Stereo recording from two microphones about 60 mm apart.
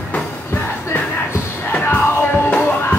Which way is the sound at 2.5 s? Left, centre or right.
Left.